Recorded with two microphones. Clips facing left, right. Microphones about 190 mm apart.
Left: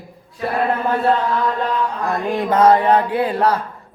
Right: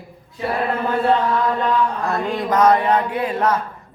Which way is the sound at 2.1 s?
25° left (ahead or behind).